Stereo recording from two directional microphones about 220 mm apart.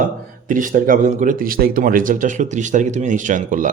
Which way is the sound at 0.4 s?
35° right (ahead or behind).